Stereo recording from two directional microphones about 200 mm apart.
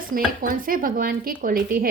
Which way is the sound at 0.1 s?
45° right (ahead or behind).